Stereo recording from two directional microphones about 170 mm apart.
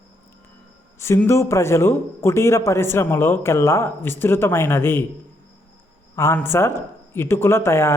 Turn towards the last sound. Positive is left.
turn(degrees=15)  # may be behind; listen again after turning